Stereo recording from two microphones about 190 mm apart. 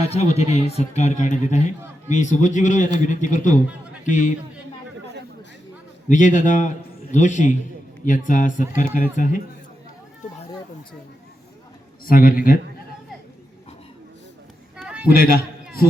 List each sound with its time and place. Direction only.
0.0 s a man's voice: 35° left (ahead or behind)
6.1 s a man's voice: 40° left (ahead or behind)
12.0 s speech: 50° left (ahead or behind)
14.8 s a sound: 5° right (ahead or behind)
15.1 s speech: 50° left (ahead or behind)